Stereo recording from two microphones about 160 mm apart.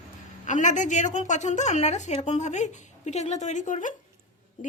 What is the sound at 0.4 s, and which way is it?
A woman's voice, 50° left (ahead or behind).